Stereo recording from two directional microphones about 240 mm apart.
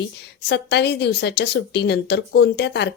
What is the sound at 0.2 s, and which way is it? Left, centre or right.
A woman's voice, left.